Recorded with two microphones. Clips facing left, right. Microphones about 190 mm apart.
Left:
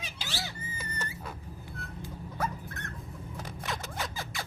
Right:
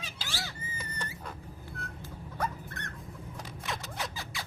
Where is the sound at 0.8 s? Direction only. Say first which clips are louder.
Left 1 dB; 5° left (ahead or behind).